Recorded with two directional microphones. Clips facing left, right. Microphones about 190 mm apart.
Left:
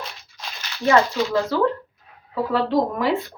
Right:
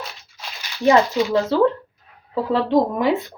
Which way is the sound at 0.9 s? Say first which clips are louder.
Right 2 dB; 20° right (ahead or behind).